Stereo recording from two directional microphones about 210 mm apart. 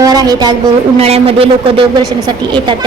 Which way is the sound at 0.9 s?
30° right (ahead or behind).